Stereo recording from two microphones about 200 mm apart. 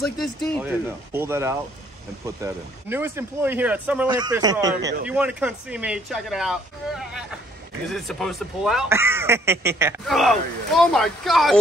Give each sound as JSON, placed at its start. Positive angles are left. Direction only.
{"t": 0.5, "sound": "speech", "side_deg": -5}
{"t": 4.2, "sound": "speech", "side_deg": -20}
{"t": 5.0, "sound": "speech", "side_deg": -5}
{"t": 8.9, "sound": "speech", "side_deg": -10}
{"t": 10.0, "sound": "speech", "side_deg": 0}